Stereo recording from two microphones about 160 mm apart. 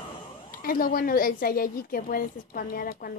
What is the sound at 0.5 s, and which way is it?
A woman's voice, 65° left (ahead or behind).